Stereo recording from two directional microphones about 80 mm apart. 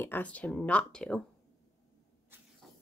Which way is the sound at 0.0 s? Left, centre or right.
Left.